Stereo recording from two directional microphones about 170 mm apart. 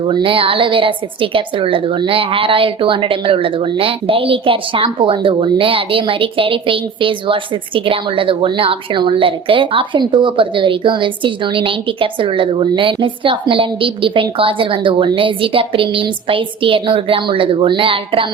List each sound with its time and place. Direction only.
0.1 s a woman's voice: 30° right (ahead or behind)